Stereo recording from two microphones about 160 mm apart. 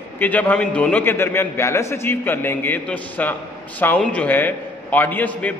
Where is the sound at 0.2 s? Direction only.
10° left (ahead or behind).